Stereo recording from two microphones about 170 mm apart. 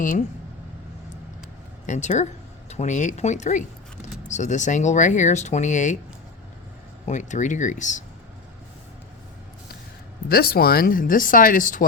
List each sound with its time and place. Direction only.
1.9 s speech: 45° left (ahead or behind)
7.0 s speech: 45° left (ahead or behind)
10.2 s speech: 65° left (ahead or behind)